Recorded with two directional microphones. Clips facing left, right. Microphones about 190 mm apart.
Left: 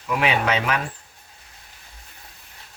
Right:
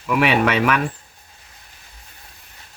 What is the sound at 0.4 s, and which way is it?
Speech, 65° right (ahead or behind).